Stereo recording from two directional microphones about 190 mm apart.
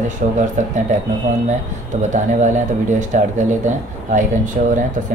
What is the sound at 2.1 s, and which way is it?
Speech, 40° right (ahead or behind).